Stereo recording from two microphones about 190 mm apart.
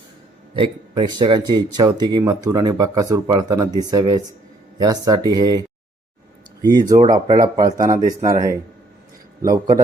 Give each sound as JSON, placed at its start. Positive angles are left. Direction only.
{"t": 0.5, "sound": "speech", "side_deg": -25}
{"t": 6.6, "sound": "speech", "side_deg": -20}